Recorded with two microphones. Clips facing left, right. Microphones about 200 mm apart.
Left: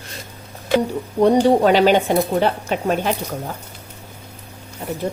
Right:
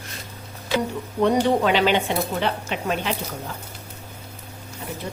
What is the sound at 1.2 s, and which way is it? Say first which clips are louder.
Speech: left 5 dB; 40° left (ahead or behind).